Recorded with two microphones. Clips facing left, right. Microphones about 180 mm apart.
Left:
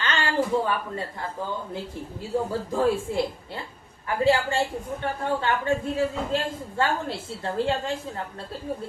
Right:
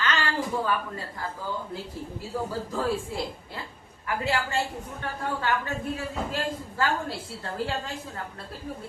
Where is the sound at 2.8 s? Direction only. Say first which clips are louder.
Left 6 dB; 25° left (ahead or behind).